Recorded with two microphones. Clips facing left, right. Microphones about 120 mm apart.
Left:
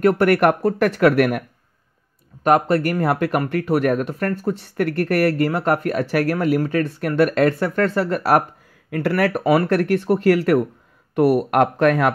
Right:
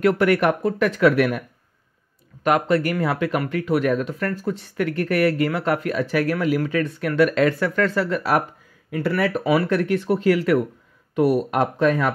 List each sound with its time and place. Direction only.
0.0 s speech: 45° left (ahead or behind)
2.4 s speech: 40° left (ahead or behind)
7.6 s speech: 40° left (ahead or behind)
8.9 s speech: 65° left (ahead or behind)